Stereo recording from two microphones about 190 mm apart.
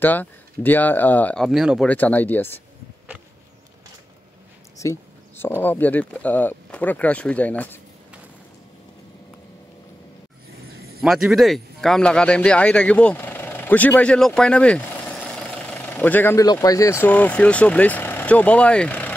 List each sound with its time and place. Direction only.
0.0 s speech: 10° left (ahead or behind)
4.8 s speech: 15° left (ahead or behind)
11.0 s speech: centre (ahead or behind)